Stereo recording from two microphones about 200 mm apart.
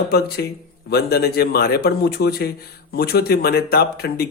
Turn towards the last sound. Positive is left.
turn(degrees=50)  # may be behind; listen again after turning